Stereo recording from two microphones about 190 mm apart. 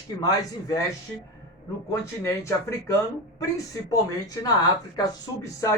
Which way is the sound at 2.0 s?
15° left (ahead or behind).